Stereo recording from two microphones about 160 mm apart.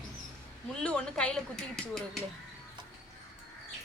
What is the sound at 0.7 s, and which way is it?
Speech, 5° left (ahead or behind).